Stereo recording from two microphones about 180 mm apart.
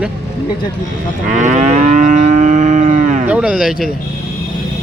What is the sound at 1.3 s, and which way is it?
Moo, 45° right (ahead or behind).